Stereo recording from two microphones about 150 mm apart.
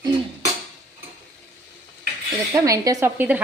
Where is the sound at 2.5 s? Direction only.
20° right (ahead or behind).